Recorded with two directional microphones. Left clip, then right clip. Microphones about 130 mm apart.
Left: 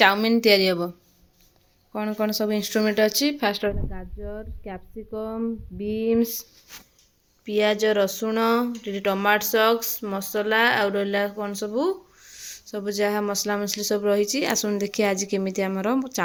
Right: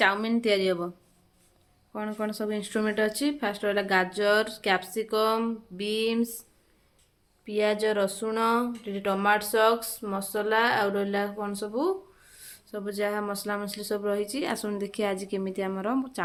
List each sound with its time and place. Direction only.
0.0 s speech: 35° left (ahead or behind)
1.9 s speech: 30° left (ahead or behind)
3.6 s speech: 10° left (ahead or behind)
5.8 s a sound: 20° left (ahead or behind)
7.4 s speech: 35° left (ahead or behind)